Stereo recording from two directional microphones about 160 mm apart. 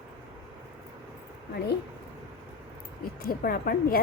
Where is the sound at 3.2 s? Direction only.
70° left (ahead or behind).